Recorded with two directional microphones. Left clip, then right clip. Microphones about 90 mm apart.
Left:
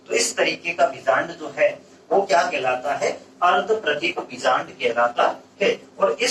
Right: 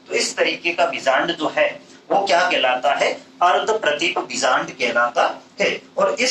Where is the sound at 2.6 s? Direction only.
25° right (ahead or behind).